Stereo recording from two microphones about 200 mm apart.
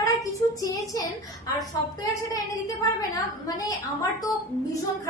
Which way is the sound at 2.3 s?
20° left (ahead or behind).